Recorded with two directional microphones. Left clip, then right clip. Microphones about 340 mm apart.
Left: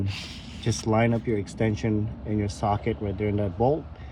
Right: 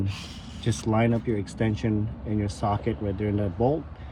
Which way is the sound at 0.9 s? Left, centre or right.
Left.